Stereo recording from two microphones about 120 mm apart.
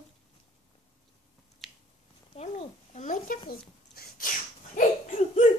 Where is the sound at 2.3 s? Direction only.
65° left (ahead or behind); by 3.2 s 80° left.